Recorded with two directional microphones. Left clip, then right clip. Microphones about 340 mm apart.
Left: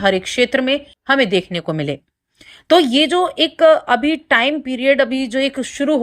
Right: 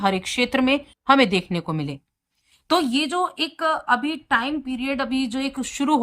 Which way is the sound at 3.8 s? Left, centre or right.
Left.